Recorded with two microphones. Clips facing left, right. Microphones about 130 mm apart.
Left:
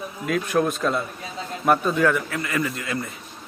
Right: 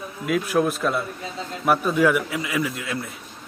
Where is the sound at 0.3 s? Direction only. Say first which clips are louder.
Right 1 dB; 5° right (ahead or behind).